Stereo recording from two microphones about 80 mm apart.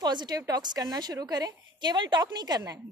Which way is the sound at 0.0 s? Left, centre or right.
Right.